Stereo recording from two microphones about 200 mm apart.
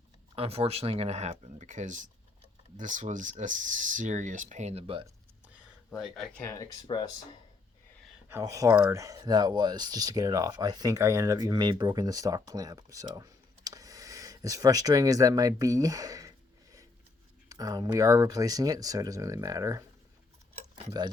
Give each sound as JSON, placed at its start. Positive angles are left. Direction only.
{"t": 0.3, "sound": "speech", "side_deg": -30}
{"t": 5.9, "sound": "speech", "side_deg": 0}
{"t": 8.3, "sound": "speech", "side_deg": -15}
{"t": 17.5, "sound": "speech", "side_deg": -20}